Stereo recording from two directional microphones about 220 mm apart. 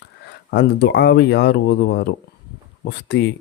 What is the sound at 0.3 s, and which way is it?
Speech, 50° left (ahead or behind).